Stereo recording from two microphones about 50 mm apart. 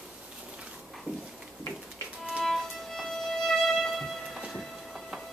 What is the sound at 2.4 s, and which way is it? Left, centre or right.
Music, centre.